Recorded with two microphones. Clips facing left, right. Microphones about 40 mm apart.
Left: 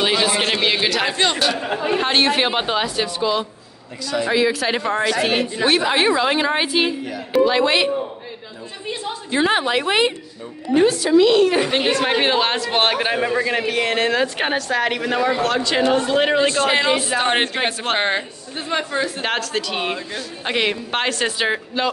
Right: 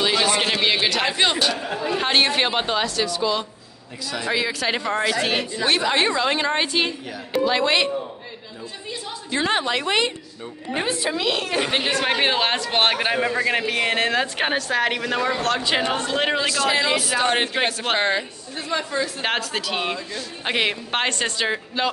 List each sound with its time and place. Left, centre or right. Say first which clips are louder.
0.1 s a sound: left 2 dB; centre
1.1 s speech: left 1 dB; centre
1.6 s speech: left 4 dB; left
2.0 s a woman's voice: left 1 dB; centre
9.3 s a woman's voice: left 4 dB; centre
10.7 s a woman's voice: left 9 dB; centre
11.1 s a woman's voice: left 10 dB; centre
15.6 s speech: left 3 dB; centre
15.9 s a woman's voice: left 5 dB; centre
16.3 s a man's voice: left 4 dB; left
19.2 s a woman's voice: left 2 dB; centre
19.8 s a woman's voice: left 2 dB; centre
20.4 s a woman's voice: left 2 dB; centre
21.4 s a woman's voice: left 3 dB; centre